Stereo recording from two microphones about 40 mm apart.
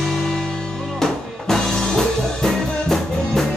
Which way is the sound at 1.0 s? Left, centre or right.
Centre.